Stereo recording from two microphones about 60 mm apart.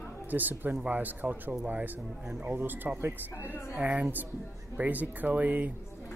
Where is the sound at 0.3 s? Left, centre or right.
Right.